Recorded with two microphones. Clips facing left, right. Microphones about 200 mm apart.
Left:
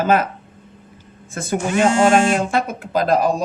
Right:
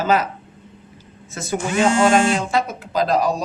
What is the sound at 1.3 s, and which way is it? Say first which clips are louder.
Speech: left 2 dB; 50° left (ahead or behind).